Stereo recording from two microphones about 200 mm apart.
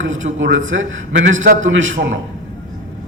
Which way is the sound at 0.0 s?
75° right (ahead or behind).